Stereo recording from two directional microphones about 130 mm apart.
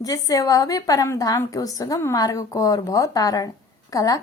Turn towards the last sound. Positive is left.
turn(degrees=25)  # may be behind; listen again after turning